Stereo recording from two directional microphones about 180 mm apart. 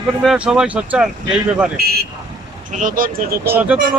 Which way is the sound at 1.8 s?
60° right (ahead or behind).